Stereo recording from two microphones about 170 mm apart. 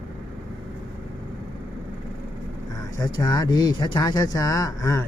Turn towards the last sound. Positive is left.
turn(degrees=20)  # may be behind; listen again after turning